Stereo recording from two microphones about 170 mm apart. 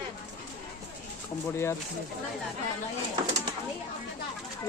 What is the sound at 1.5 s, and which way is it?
Speech, 15° left (ahead or behind).